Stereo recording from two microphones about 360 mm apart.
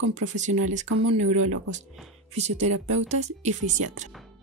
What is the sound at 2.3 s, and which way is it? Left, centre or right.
Speech, centre.